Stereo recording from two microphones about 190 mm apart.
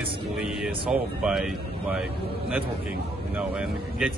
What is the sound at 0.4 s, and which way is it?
Speech, centre (ahead or behind).